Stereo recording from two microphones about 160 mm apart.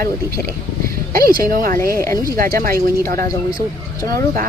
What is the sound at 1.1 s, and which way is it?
Speech, 65° right (ahead or behind).